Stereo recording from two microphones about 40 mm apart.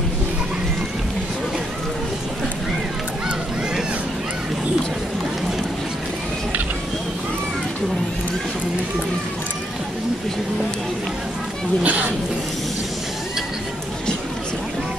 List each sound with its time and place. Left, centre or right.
11.8 s speech: right